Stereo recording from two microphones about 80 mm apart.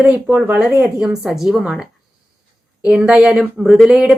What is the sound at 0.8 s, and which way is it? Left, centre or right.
Speech, centre.